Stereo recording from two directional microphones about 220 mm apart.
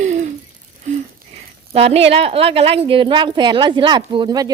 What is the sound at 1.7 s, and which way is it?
A woman's voice, 25° right (ahead or behind).